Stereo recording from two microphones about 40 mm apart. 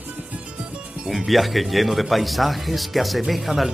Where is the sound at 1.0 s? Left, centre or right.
Centre.